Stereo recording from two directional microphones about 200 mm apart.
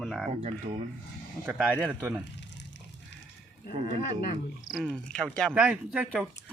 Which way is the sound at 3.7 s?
30° right (ahead or behind).